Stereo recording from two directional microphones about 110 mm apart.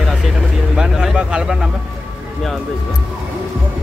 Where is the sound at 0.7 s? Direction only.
5° right (ahead or behind).